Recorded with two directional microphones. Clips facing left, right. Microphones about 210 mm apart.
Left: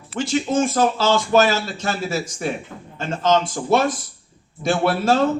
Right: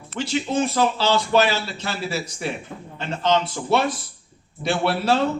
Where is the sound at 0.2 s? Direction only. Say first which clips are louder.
Left 3 dB; 45° left (ahead or behind).